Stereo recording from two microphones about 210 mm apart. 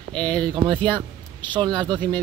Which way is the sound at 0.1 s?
5° left (ahead or behind).